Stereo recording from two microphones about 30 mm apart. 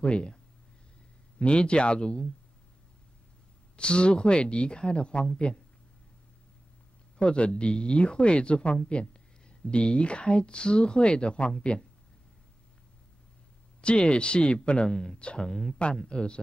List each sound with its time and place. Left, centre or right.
0.0 s speech: left
1.4 s speech: left
3.7 s speech: left
7.2 s speech: left
13.7 s speech: left
14.9 s speech: centre
15.1 s speech: left
15.4 s speech: centre
16.1 s speech: left